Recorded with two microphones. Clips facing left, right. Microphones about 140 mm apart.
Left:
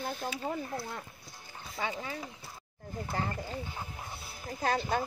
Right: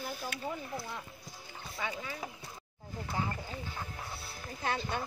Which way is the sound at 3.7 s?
20° left (ahead or behind).